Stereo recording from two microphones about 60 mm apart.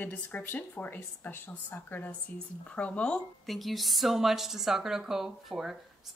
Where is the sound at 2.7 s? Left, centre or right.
Centre.